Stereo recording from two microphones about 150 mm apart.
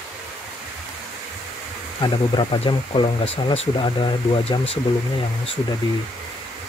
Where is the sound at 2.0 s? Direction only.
30° left (ahead or behind).